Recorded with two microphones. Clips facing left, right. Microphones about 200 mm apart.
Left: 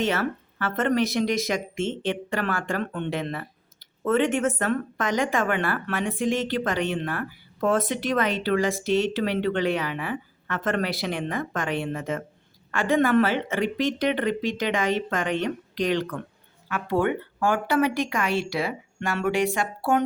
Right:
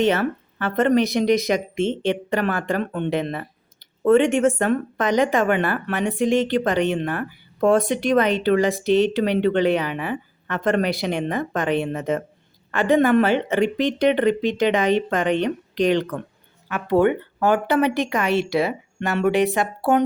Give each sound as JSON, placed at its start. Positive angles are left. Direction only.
{"t": 0.0, "sound": "speech", "side_deg": -20}